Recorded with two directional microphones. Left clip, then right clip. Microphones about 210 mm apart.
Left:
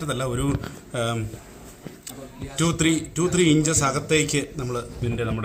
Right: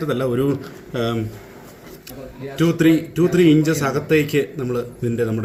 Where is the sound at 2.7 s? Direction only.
45° left (ahead or behind).